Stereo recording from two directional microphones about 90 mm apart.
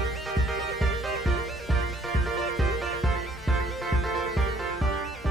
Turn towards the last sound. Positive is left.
turn(degrees=0)  # may be behind; listen again after turning